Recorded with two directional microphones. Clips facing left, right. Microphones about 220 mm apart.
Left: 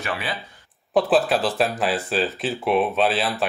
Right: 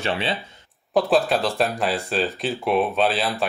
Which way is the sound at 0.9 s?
Centre (ahead or behind).